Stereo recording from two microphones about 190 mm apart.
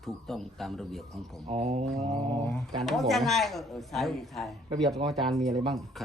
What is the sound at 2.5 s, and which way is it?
Speech, centre (ahead or behind).